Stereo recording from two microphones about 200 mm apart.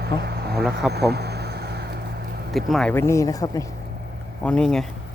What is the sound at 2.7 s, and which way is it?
Speech, 5° left (ahead or behind).